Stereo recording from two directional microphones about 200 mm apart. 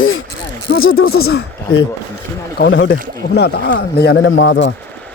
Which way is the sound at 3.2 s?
55° left (ahead or behind).